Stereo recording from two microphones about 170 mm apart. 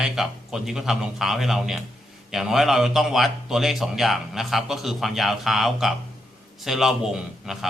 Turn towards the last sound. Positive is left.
turn(degrees=0)  # may be behind; listen again after turning